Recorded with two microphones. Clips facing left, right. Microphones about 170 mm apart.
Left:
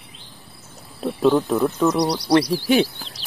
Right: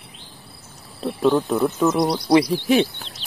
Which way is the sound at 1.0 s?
Centre (ahead or behind).